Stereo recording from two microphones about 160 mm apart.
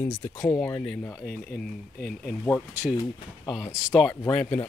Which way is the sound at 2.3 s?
5° left (ahead or behind).